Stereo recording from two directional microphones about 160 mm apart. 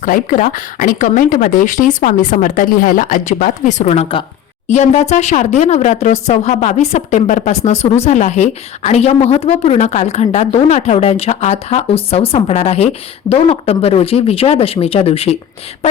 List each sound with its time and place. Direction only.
0.0 s a woman's voice: 55° left (ahead or behind); by 15.4 s 40° left (ahead or behind)